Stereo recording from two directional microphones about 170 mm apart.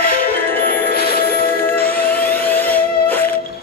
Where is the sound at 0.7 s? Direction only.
60° left (ahead or behind).